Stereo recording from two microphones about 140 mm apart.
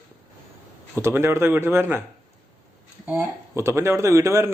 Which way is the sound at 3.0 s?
15° right (ahead or behind).